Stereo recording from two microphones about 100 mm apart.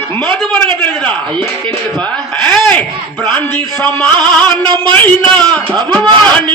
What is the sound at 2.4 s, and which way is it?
Speech, 15° left (ahead or behind).